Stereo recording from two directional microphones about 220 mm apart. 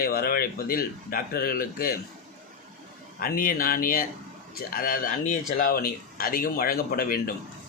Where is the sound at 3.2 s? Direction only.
40° left (ahead or behind).